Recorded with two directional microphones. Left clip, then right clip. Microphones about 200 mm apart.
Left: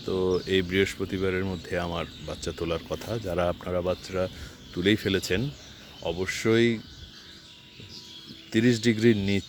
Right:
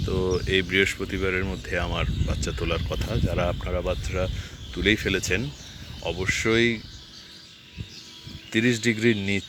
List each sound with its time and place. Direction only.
0.1 s speech: 10° left (ahead or behind)
8.5 s speech: 20° left (ahead or behind)